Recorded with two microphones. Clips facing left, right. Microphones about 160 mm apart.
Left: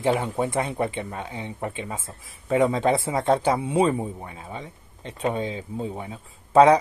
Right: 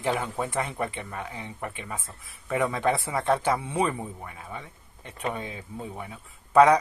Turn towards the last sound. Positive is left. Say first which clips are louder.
# left 3 dB
turn(degrees=25)  # may be behind; listen again after turning